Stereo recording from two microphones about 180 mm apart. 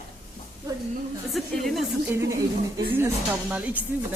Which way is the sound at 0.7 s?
20° right (ahead or behind).